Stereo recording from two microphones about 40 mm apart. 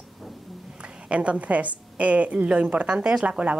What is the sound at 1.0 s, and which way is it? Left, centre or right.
A woman's voice, right.